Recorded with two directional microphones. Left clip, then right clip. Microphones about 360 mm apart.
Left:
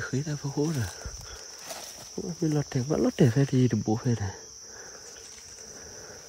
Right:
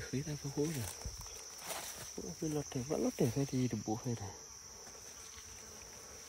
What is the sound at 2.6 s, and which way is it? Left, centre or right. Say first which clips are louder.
Cricket: left 8 dB; left.